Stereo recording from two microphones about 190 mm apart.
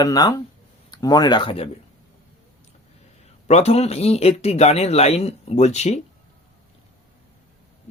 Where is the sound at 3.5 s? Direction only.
35° left (ahead or behind).